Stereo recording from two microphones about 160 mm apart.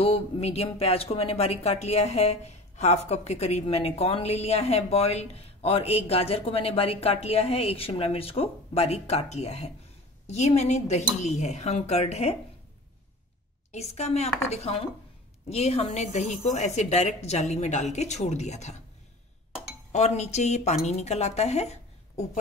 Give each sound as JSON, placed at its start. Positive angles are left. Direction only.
{"t": 0.0, "sound": "a woman's voice", "side_deg": 40}
{"t": 13.7, "sound": "a woman's voice", "side_deg": 40}
{"t": 19.9, "sound": "a woman's voice", "side_deg": 45}